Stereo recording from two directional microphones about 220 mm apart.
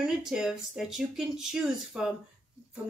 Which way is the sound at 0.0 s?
5° right (ahead or behind).